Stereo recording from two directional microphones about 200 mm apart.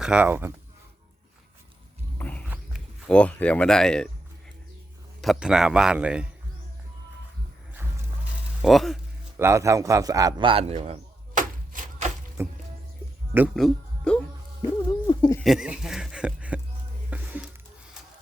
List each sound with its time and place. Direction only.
0.0 s speech: 5° right (ahead or behind)
2.1 s a sound: 10° left (ahead or behind)
3.1 s a man's voice: 5° left (ahead or behind)
5.2 s a man's voice: centre (ahead or behind)
8.6 s a man's voice: centre (ahead or behind)
9.4 s speech: 15° right (ahead or behind); by 11.8 s 40° right (ahead or behind)
12.4 s speech: 10° right (ahead or behind); by 14.2 s 5° left (ahead or behind)
14.8 s owl: 20° left (ahead or behind)
15.4 s speech: centre (ahead or behind)
17.1 s music: 5° right (ahead or behind)